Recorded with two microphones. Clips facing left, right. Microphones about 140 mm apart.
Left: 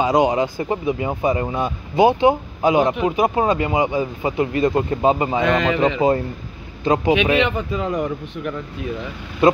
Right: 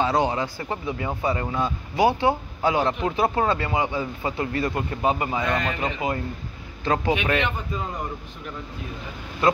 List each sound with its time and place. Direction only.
0.0 s speech: 15° left (ahead or behind)
5.4 s a man's voice: 90° left
6.8 s speech: 15° left (ahead or behind)
7.4 s a man's voice: 90° left
9.4 s speech: 20° left (ahead or behind)